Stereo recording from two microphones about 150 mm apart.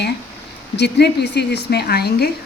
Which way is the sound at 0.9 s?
90° left.